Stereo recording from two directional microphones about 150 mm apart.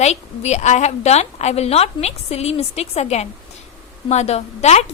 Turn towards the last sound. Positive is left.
turn(degrees=45)  # may be behind; listen again after turning